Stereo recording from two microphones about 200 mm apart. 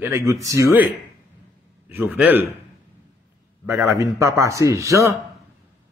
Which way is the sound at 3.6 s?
10° right (ahead or behind).